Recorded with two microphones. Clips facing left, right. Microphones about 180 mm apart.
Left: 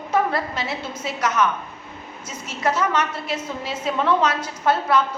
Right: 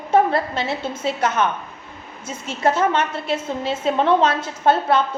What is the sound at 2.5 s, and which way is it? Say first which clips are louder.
A woman's voice: right 4 dB; 25° right (ahead or behind).